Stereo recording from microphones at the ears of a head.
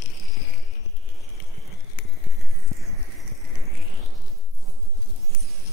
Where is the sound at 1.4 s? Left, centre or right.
Left.